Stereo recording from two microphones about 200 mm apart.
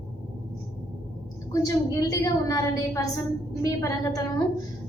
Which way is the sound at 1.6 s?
15° left (ahead or behind).